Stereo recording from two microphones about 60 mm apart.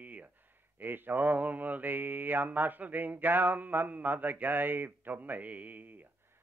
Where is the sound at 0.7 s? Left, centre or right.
Right.